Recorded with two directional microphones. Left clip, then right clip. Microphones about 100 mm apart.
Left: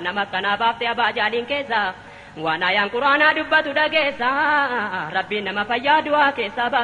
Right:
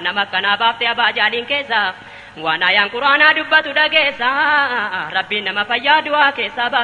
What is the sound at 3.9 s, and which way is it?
A woman's voice, 50° right (ahead or behind).